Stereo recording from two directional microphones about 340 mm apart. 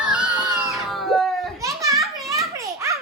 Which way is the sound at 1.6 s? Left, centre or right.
Centre.